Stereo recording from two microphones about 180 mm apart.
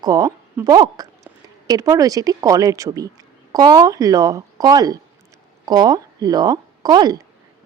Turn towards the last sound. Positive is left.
turn(degrees=-20)  # may be behind; listen again after turning